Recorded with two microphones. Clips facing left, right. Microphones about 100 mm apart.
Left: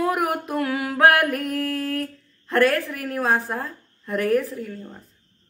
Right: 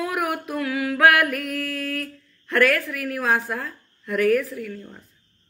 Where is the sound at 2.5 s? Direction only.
30° left (ahead or behind).